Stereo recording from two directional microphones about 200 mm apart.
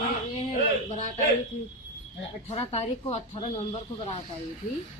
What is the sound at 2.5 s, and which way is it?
Speech, 30° left (ahead or behind).